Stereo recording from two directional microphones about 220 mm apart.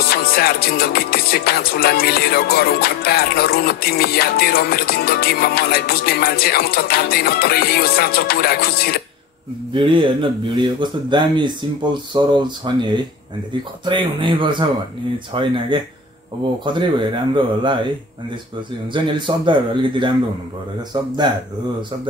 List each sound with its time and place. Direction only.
0.1 s music: 45° left (ahead or behind)
9.8 s speech: 20° right (ahead or behind)
18.9 s speech: 20° right (ahead or behind)